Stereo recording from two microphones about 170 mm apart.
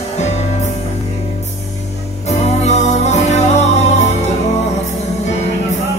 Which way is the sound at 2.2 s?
40° left (ahead or behind).